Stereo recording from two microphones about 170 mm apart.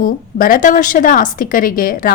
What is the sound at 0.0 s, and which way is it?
A woman's voice, 55° left (ahead or behind).